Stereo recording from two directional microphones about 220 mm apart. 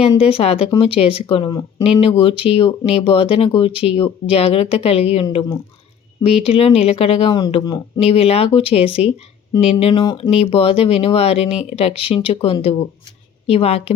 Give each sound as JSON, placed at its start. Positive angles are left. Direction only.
{"t": 0.2, "sound": "speech", "side_deg": 25}
{"t": 5.2, "sound": "speech", "side_deg": 15}